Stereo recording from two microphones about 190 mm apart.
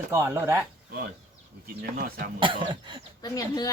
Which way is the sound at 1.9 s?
45° right (ahead or behind).